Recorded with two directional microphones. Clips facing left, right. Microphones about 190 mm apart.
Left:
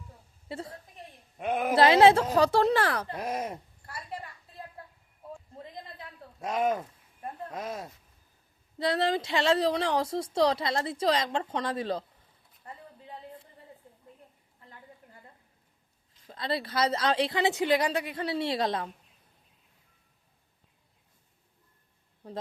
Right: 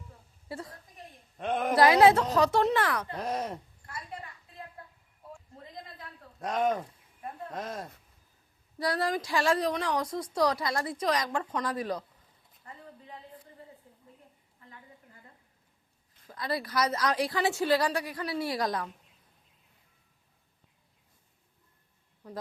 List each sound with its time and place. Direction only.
0.4 s a woman's voice: 25° left (ahead or behind)
1.4 s speech: 10° left (ahead or behind)
1.7 s a woman's voice: 25° left (ahead or behind)
3.2 s speech: 10° left (ahead or behind)
6.4 s speech: 5° left (ahead or behind)
8.8 s a woman's voice: 25° left (ahead or behind)
16.2 s a woman's voice: 25° left (ahead or behind)
22.2 s a woman's voice: 30° left (ahead or behind)